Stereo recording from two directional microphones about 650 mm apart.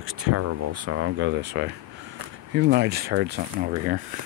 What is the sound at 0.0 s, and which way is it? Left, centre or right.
Speech, right.